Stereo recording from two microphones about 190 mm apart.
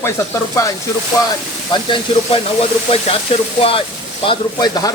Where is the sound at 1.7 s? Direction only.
30° left (ahead or behind).